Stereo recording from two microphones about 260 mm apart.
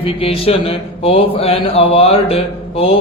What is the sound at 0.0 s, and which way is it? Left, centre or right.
A man's voice, left.